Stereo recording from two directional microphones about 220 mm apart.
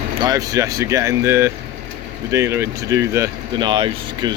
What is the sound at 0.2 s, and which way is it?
Speech, 15° right (ahead or behind).